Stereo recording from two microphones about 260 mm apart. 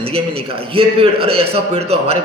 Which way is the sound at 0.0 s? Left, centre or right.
Right.